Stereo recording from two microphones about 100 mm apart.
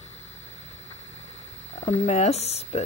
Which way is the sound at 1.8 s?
90° left.